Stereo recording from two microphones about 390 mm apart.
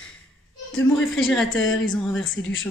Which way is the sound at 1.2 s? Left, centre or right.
Centre.